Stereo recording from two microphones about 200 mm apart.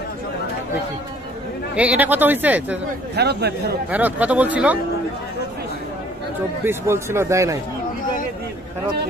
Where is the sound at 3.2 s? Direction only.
55° right (ahead or behind).